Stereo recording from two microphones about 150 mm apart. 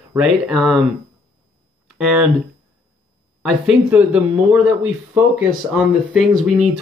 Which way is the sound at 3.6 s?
10° right (ahead or behind).